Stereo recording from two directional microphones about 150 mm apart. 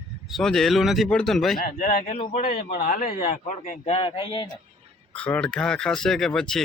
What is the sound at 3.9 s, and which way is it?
Speech, 35° left (ahead or behind).